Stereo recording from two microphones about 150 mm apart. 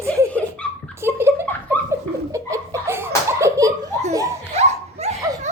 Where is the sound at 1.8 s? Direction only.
10° left (ahead or behind).